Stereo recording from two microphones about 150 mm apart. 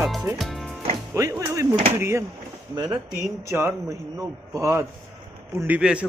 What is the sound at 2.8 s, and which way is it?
Speech, 30° right (ahead or behind).